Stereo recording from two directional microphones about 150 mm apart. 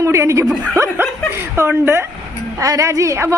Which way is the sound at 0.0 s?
20° right (ahead or behind).